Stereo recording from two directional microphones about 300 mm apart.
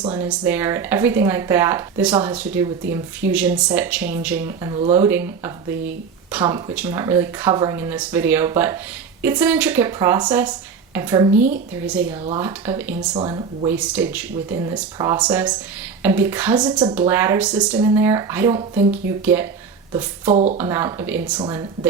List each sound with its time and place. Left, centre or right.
0.0 s speech: centre
13.7 s speech: centre
20.3 s speech: right
20.6 s speech: centre